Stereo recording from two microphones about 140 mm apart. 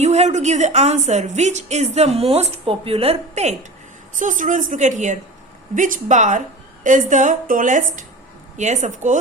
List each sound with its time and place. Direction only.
0.0 s a woman's voice: 55° right (ahead or behind)
4.1 s a woman's voice: 65° right (ahead or behind)
8.5 s a woman's voice: 55° right (ahead or behind)